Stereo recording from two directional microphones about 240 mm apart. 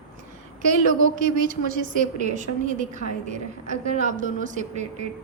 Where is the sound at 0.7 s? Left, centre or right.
Right.